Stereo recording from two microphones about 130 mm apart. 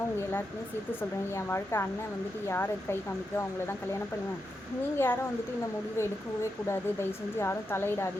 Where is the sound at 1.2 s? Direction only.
20° left (ahead or behind).